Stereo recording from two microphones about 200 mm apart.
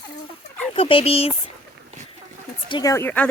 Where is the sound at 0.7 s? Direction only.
25° left (ahead or behind).